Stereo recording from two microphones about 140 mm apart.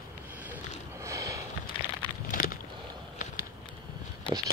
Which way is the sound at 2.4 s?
90° left.